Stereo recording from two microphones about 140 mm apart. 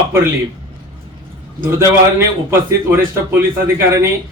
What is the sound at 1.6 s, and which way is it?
A man's voice, 15° right (ahead or behind).